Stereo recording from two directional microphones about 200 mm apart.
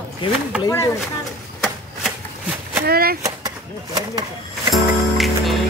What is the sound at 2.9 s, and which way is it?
Speech, 50° right (ahead or behind).